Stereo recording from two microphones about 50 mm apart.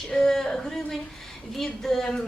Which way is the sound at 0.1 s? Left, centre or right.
Centre.